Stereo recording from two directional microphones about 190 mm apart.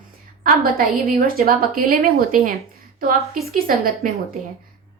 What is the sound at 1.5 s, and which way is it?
Speech, 50° right (ahead or behind).